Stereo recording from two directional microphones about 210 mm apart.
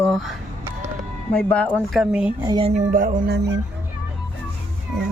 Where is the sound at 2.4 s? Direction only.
20° right (ahead or behind).